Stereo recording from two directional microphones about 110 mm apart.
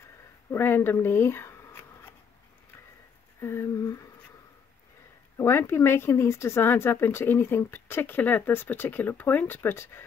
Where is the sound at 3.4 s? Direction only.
25° left (ahead or behind).